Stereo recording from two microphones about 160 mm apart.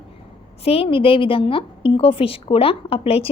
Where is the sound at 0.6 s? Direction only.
35° left (ahead or behind).